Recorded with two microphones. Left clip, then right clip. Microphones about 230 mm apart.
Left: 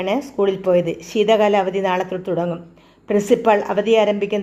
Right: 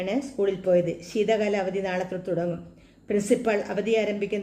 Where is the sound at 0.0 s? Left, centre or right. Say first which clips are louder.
Left 7 dB; centre.